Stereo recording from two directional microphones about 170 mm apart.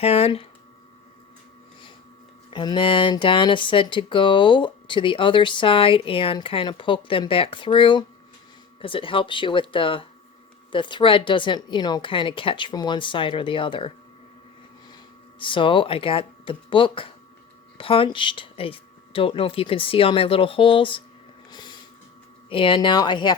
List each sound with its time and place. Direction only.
0.0 s speech: 35° left (ahead or behind)
2.5 s speech: 30° left (ahead or behind)
15.4 s speech: 30° left (ahead or behind)
21.5 s a sound: 25° left (ahead or behind)
22.4 s speech: 30° left (ahead or behind)